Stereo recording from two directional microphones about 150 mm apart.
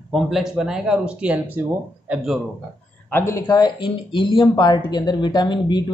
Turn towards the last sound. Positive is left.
turn(degrees=30)  # may be behind; listen again after turning